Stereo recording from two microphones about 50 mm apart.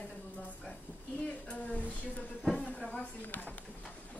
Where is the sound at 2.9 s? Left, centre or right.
Left.